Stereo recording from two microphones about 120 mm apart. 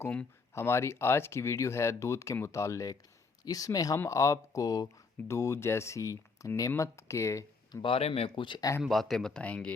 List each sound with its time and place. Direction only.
0.5 s speech: 20° left (ahead or behind)
7.8 s speech: 50° left (ahead or behind)
8.4 s speech: 35° left (ahead or behind)
8.8 s speech: centre (ahead or behind)